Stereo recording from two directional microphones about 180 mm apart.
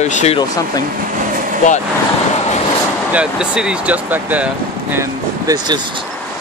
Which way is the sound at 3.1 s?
5° right (ahead or behind).